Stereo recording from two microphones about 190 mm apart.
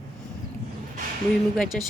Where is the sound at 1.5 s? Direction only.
Centre (ahead or behind).